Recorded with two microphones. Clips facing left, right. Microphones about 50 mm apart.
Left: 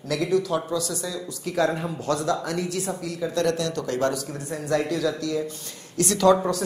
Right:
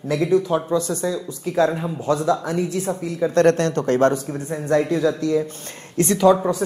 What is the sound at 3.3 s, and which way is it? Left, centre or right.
A man's voice, right.